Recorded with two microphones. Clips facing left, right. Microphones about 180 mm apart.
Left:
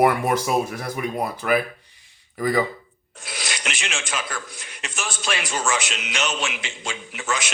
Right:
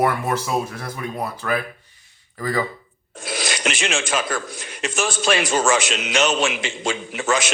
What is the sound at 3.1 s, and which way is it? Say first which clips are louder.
A man's voice: right 7 dB; 90° right.